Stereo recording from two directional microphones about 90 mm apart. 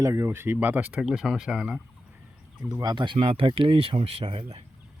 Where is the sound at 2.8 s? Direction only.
50° right (ahead or behind).